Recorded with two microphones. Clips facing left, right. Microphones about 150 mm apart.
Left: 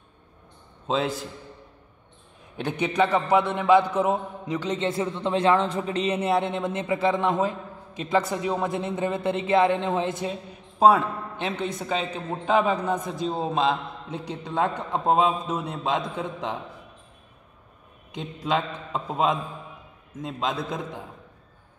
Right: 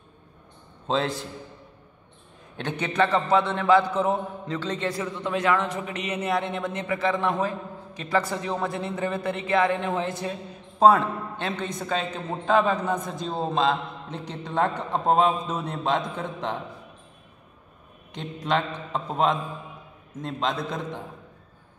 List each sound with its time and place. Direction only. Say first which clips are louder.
0.8 s a man's voice: even; 5° left (ahead or behind)
2.5 s a man's voice: left 2 dB; 10° left (ahead or behind)
10.8 s a man's voice: even; 5° left (ahead or behind)
18.1 s a man's voice: even; 5° left (ahead or behind)